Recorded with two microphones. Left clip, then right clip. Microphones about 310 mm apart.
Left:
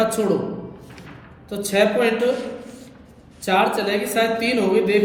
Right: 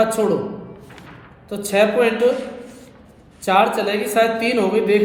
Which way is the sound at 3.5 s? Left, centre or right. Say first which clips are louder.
Right 3 dB; centre.